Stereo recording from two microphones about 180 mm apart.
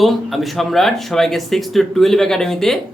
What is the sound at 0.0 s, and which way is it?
Speech, centre (ahead or behind).